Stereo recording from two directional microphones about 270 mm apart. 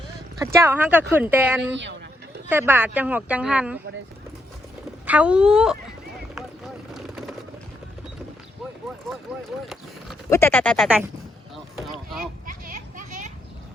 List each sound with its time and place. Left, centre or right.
0.3 s speech: centre
1.7 s speech: right
2.5 s speech: centre
5.0 s speech: centre
6.9 s vehicle: centre
10.2 s speech: centre
12.5 s a sound: right